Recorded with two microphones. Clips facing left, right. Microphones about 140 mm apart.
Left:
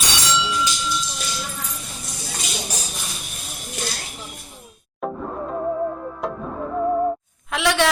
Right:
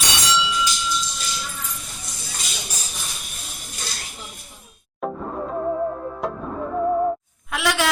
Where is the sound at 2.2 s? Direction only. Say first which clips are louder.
Left 5 dB; 50° left (ahead or behind).